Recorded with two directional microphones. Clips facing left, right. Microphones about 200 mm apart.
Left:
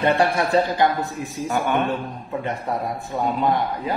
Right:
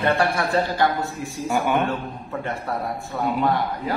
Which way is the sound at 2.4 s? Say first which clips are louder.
Left 1 dB; 15° left (ahead or behind).